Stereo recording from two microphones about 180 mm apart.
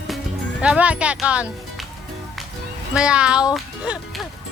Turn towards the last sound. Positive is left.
turn(degrees=-5)  # may be behind; listen again after turning